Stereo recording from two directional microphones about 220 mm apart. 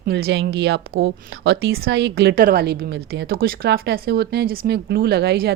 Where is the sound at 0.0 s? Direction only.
45° right (ahead or behind).